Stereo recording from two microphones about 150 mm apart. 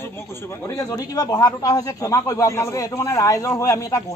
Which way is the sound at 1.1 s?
25° left (ahead or behind).